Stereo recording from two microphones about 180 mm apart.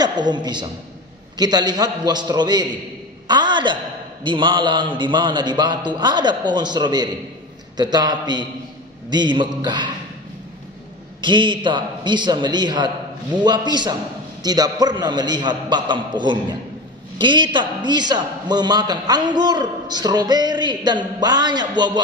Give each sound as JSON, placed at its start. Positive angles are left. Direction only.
{"t": 0.0, "sound": "a woman's voice", "side_deg": -25}
{"t": 3.3, "sound": "a sound", "side_deg": -25}
{"t": 4.2, "sound": "a man's voice", "side_deg": -25}
{"t": 11.1, "sound": "a man's voice", "side_deg": -25}